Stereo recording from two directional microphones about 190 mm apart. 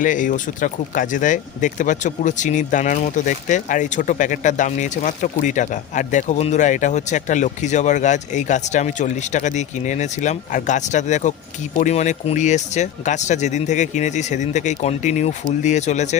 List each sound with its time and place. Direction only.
0.0 s speech: 45° left (ahead or behind)